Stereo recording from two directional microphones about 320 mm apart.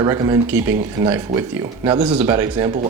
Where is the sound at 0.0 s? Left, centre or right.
Centre.